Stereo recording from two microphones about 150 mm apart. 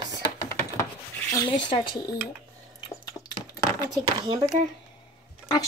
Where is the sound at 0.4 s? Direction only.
20° left (ahead or behind).